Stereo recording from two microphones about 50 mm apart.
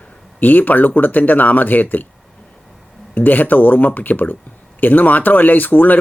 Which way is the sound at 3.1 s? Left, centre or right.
Left.